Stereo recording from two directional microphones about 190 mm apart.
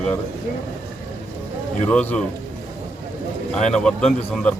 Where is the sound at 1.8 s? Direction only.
5° left (ahead or behind).